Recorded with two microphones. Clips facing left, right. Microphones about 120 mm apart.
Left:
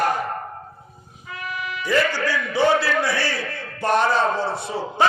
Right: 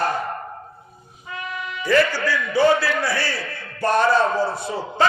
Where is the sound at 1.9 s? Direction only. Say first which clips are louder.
Right 2 dB; 20° left (ahead or behind).